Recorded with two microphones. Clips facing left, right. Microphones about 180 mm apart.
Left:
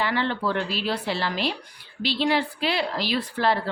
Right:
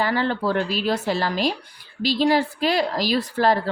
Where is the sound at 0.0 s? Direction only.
40° right (ahead or behind).